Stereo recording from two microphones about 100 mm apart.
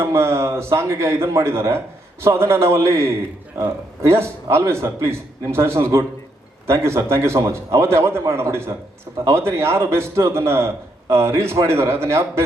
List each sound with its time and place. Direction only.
0.0 s a man's voice: 25° right (ahead or behind)